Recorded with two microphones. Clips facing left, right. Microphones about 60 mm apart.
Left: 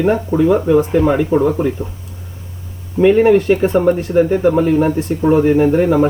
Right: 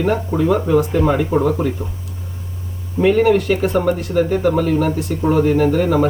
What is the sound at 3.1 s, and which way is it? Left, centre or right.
Speech, left.